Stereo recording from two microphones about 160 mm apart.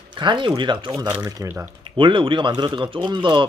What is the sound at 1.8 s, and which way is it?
A man's voice, 30° right (ahead or behind).